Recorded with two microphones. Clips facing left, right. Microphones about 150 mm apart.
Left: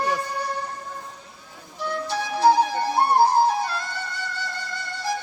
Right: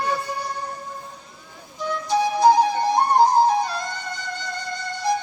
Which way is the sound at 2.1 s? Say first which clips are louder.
Right 3 dB; 15° right (ahead or behind).